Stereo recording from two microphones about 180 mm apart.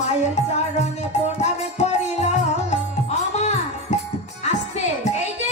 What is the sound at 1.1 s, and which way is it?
Music, 40° left (ahead or behind).